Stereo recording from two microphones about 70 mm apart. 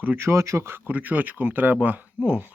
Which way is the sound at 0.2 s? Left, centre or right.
Right.